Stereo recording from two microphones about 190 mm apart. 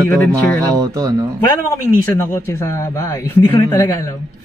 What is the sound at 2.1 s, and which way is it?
Speech, 15° left (ahead or behind).